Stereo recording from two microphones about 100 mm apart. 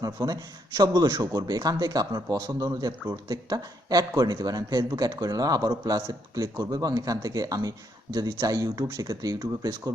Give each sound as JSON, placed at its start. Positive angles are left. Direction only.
{"t": 0.0, "sound": "a man's voice", "side_deg": -40}